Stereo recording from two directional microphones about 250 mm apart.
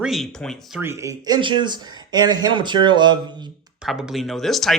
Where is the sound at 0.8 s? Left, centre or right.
Centre.